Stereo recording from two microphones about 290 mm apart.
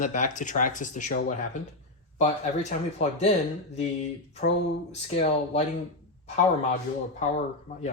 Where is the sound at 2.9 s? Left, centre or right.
Left.